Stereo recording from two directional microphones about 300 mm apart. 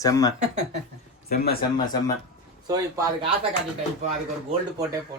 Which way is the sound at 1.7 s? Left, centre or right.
Centre.